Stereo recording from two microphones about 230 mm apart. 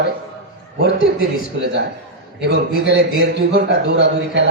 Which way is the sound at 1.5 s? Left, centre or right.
Right.